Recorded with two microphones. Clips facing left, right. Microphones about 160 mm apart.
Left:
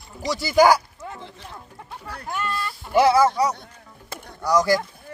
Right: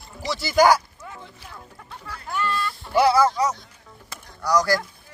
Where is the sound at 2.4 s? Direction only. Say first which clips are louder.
Right 2 dB; 15° left (ahead or behind).